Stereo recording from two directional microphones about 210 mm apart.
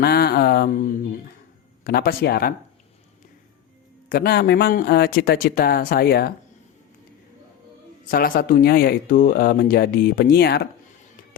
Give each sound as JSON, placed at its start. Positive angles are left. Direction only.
{"t": 0.0, "sound": "speech", "side_deg": 50}
{"t": 4.1, "sound": "speech", "side_deg": 45}
{"t": 8.1, "sound": "speech", "side_deg": 45}